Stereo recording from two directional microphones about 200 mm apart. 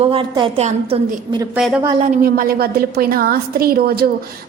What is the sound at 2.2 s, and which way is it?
A woman's voice, 50° right (ahead or behind).